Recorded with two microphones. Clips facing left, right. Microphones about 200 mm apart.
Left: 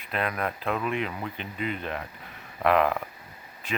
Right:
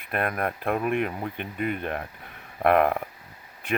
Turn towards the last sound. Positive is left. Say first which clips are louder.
# right 4 dB
turn(degrees=-60)  # may be behind; listen again after turning